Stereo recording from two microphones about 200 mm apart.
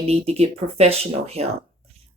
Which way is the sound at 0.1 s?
30° right (ahead or behind).